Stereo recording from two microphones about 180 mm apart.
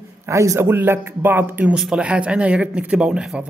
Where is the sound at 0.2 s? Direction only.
15° right (ahead or behind).